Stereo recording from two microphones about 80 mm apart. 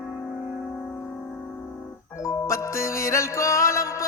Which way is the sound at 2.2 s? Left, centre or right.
Left.